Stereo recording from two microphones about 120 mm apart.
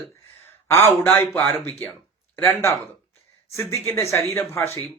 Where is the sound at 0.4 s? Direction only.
20° left (ahead or behind).